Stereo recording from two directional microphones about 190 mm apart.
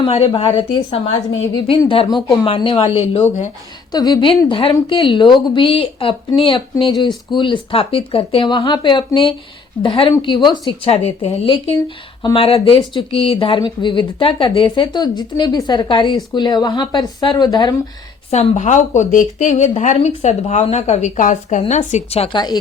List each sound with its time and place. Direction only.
0.0 s speech: 30° left (ahead or behind)
3.9 s speech: 20° left (ahead or behind)
18.3 s speech: 35° left (ahead or behind)